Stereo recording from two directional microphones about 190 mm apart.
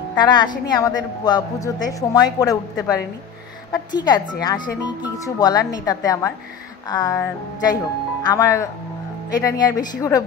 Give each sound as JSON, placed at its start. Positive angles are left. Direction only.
{"t": 0.2, "sound": "a woman's voice", "side_deg": 25}